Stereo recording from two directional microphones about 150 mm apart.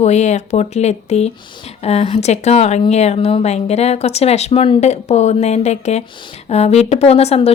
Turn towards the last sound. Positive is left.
turn(degrees=40)  # may be behind; listen again after turning